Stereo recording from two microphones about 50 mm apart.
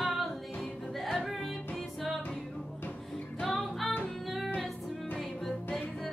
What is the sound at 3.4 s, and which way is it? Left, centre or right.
Music, centre.